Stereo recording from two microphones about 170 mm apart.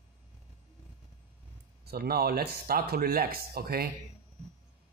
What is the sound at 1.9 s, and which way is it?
Speech, 65° right (ahead or behind).